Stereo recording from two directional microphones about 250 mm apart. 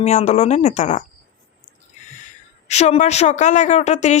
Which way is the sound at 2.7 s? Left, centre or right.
Left.